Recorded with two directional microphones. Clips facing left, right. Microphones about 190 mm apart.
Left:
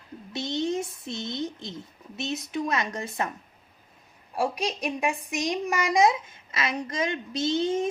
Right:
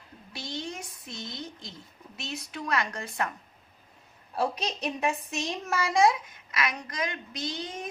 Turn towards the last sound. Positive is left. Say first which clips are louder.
# left 11 dB
turn(degrees=25)  # may be behind; listen again after turning